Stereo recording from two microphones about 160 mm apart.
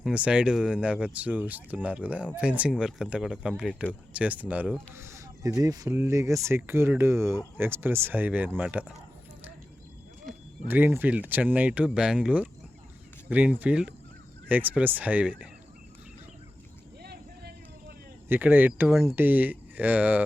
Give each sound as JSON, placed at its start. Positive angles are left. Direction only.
{"t": 0.0, "sound": "speech", "side_deg": -5}
{"t": 10.7, "sound": "speech", "side_deg": -10}
{"t": 17.0, "sound": "vehicle", "side_deg": -80}
{"t": 18.3, "sound": "speech", "side_deg": -10}